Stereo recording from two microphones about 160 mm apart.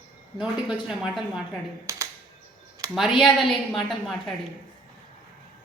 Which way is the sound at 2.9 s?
Centre (ahead or behind).